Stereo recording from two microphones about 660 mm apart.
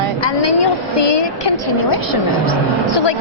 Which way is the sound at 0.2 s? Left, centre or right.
Left.